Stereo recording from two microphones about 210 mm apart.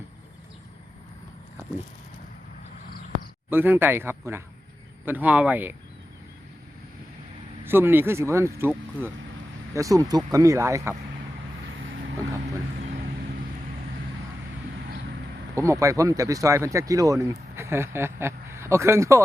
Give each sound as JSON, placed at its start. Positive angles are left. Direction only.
{"t": 3.5, "sound": "speech", "side_deg": -10}
{"t": 7.6, "sound": "speech", "side_deg": -10}
{"t": 12.8, "sound": "vehicle", "side_deg": -40}
{"t": 15.5, "sound": "speech", "side_deg": -15}